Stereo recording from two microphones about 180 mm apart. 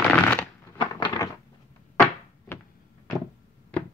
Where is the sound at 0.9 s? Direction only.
20° left (ahead or behind).